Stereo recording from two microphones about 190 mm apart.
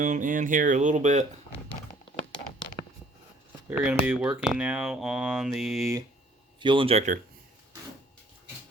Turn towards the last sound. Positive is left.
turn(degrees=-40)  # may be behind; listen again after turning